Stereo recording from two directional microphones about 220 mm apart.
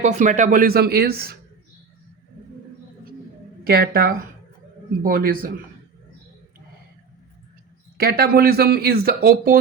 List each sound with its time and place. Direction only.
0.0 s speech: 35° right (ahead or behind)
3.7 s speech: 45° right (ahead or behind)
7.9 s speech: 45° right (ahead or behind)